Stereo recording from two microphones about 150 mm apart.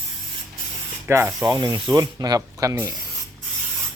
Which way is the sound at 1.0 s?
15° right (ahead or behind).